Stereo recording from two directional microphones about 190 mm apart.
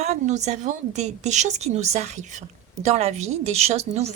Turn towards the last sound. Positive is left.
turn(degrees=-35)  # may be behind; listen again after turning